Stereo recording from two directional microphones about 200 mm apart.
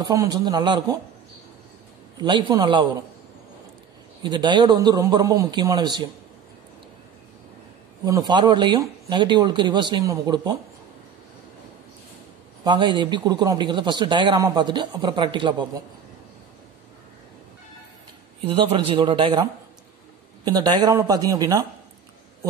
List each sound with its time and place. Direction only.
0.0 s a man's voice: 20° right (ahead or behind)
2.1 s a man's voice: 20° right (ahead or behind)
4.2 s a man's voice: 20° right (ahead or behind)
8.0 s a man's voice: 20° right (ahead or behind)
12.6 s a man's voice: 25° right (ahead or behind)
18.4 s a man's voice: 25° right (ahead or behind)